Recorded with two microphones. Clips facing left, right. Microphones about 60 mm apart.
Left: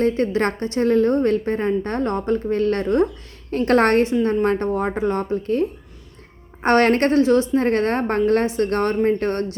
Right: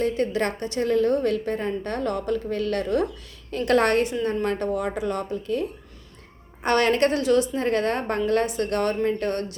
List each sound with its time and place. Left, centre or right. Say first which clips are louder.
0.0 s a woman's voice: left 4 dB; left